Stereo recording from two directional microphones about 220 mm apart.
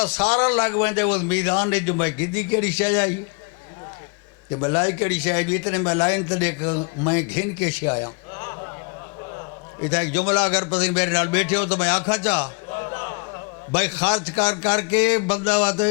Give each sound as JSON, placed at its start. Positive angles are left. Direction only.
{"t": 0.0, "sound": "a man's voice", "side_deg": 10}
{"t": 4.6, "sound": "a man's voice", "side_deg": 20}
{"t": 7.9, "sound": "a sound", "side_deg": 20}
{"t": 9.9, "sound": "a man's voice", "side_deg": 10}
{"t": 12.7, "sound": "a sound", "side_deg": 20}
{"t": 13.7, "sound": "a man's voice", "side_deg": 10}